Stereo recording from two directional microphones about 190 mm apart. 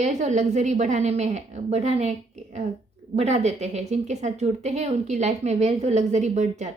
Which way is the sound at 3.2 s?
35° right (ahead or behind).